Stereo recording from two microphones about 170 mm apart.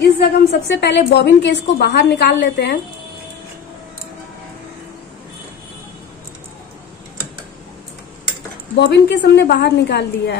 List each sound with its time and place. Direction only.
0.0 s a woman's voice: 75° left (ahead or behind)
8.7 s a woman's voice: 85° left